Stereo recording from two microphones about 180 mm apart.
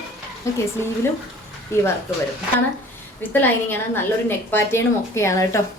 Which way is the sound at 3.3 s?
10° left (ahead or behind).